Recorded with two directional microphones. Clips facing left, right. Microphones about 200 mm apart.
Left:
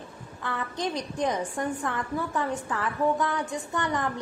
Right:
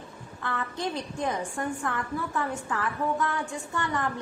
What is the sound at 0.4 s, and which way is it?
A woman's voice, 15° left (ahead or behind).